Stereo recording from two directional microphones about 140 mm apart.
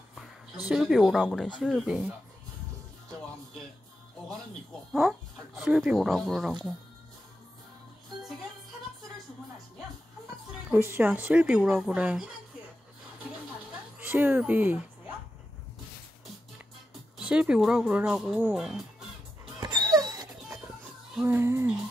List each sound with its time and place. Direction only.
0.7 s speech: 5° right (ahead or behind)
5.6 s speech: 5° right (ahead or behind)
10.7 s speech: 15° right (ahead or behind)
13.9 s speech: 15° right (ahead or behind)
17.2 s speech: 5° right (ahead or behind)
19.6 s music: 30° right (ahead or behind)
21.2 s speech: 15° right (ahead or behind)